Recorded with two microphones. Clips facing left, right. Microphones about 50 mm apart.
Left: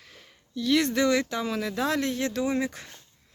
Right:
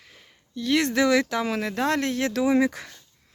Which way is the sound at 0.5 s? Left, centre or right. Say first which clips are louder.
Right 1 dB; right.